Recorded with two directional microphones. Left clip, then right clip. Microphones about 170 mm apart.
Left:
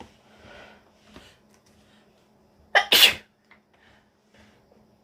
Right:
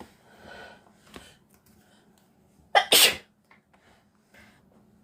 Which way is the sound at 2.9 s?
50° right (ahead or behind).